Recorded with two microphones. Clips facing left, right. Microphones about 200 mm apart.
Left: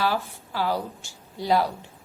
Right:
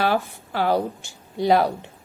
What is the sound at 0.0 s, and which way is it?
Speech, 60° right (ahead or behind).